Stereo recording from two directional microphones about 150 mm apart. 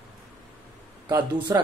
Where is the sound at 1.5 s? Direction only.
25° right (ahead or behind).